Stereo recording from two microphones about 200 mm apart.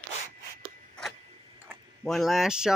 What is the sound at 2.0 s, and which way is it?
Speech, centre (ahead or behind).